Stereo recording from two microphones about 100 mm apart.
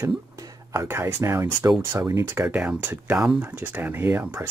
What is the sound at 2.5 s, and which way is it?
Speech, 15° right (ahead or behind).